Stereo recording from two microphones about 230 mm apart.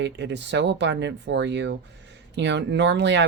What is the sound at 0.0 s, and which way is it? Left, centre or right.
A woman's voice, right.